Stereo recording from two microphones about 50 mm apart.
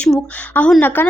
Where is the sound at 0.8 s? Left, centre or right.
Left.